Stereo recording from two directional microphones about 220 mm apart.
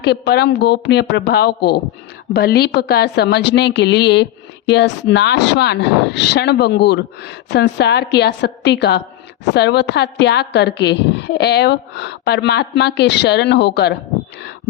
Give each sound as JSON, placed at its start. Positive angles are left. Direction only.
{"t": 0.0, "sound": "a woman's voice", "side_deg": 50}